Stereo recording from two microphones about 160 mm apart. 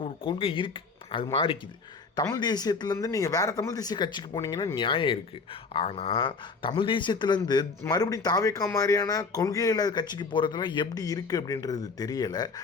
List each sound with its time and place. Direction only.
0.0 s speech: 35° left (ahead or behind)